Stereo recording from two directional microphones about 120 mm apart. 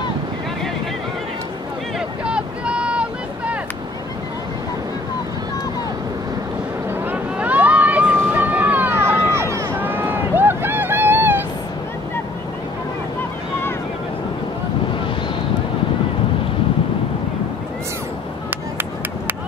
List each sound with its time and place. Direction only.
2.0 s vehicle: 10° right (ahead or behind)
7.1 s vehicle: 15° right (ahead or behind)